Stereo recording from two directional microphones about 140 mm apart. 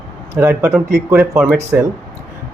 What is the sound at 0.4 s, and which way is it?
Speech, 10° right (ahead or behind).